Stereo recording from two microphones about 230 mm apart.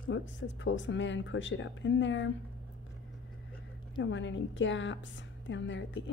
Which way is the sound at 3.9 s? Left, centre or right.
Left.